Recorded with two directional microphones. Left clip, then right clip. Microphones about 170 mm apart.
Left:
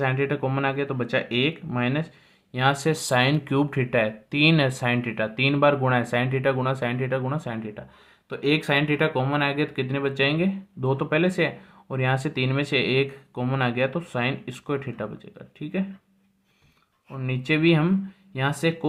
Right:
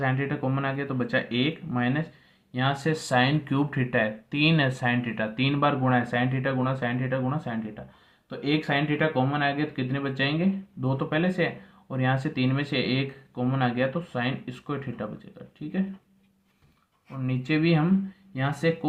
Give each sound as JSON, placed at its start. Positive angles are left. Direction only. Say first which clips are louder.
{"t": 0.0, "sound": "speech", "louder": "left 3 dB", "side_deg": 35}
{"t": 17.2, "sound": "speech", "louder": "left 3 dB", "side_deg": 35}